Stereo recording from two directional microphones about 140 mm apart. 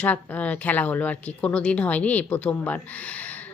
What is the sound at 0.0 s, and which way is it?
Speech, 10° left (ahead or behind).